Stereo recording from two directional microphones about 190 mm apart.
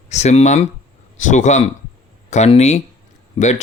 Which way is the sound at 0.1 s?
35° left (ahead or behind).